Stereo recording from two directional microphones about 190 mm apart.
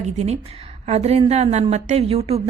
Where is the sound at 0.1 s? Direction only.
35° right (ahead or behind).